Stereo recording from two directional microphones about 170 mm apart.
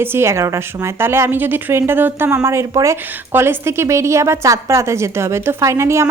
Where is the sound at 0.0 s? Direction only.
15° right (ahead or behind).